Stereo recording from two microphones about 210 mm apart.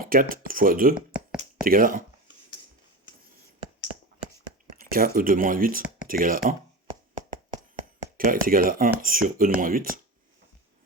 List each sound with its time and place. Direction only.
0.0 s speech: 40° right (ahead or behind)
4.7 s speech: 45° right (ahead or behind)
8.2 s speech: 40° right (ahead or behind)